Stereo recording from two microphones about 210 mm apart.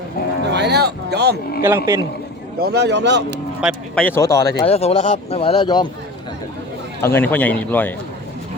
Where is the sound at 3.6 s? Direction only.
5° right (ahead or behind).